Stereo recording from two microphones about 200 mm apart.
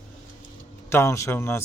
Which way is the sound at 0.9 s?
15° left (ahead or behind).